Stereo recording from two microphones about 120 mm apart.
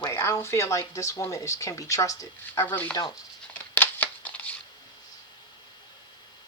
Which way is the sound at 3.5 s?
15° left (ahead or behind).